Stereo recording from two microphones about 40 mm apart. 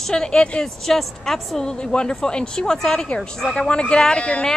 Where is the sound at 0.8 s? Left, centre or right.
Centre.